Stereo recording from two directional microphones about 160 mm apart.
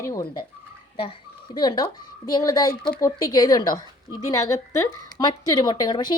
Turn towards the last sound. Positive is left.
turn(degrees=25)  # may be behind; listen again after turning